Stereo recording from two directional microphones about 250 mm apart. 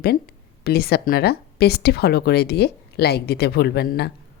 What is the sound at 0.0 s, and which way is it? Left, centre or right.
A woman's voice, left.